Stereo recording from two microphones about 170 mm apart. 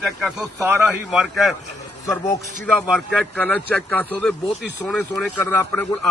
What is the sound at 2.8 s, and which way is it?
Speech, centre (ahead or behind).